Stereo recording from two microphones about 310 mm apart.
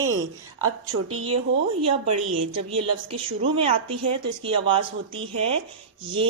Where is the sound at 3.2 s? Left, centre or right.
Centre.